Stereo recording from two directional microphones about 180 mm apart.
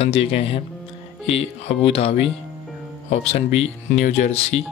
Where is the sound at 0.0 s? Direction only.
35° left (ahead or behind).